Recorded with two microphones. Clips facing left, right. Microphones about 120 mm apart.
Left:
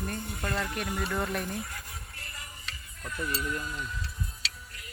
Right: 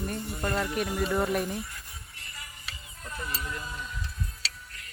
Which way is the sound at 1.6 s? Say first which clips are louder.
Left 1 dB; 55° left (ahead or behind).